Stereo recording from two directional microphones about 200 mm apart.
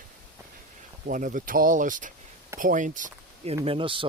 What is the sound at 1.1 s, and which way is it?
Speech, 40° right (ahead or behind).